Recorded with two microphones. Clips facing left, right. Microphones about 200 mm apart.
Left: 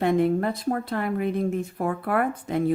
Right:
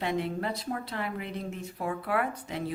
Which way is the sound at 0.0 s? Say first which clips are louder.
Left 9 dB; 50° left (ahead or behind).